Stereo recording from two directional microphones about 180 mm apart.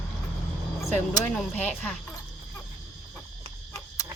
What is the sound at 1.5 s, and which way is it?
Speech, 10° left (ahead or behind).